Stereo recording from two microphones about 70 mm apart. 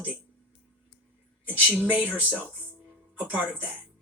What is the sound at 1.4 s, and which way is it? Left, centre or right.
Speech, right.